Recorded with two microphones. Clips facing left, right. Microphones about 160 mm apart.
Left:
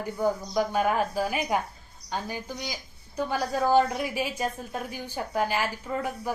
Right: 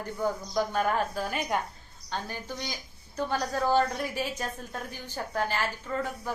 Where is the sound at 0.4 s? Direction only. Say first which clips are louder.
Left 2 dB; 5° left (ahead or behind).